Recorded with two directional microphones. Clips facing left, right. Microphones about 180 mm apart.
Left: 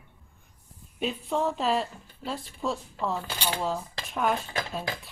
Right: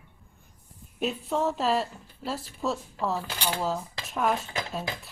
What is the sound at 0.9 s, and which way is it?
A woman's voice, centre (ahead or behind).